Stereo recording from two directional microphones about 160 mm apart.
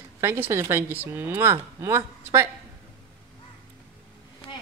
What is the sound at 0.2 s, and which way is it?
A woman's voice, 15° right (ahead or behind).